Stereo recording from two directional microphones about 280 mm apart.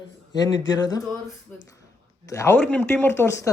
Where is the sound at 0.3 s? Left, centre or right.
Centre.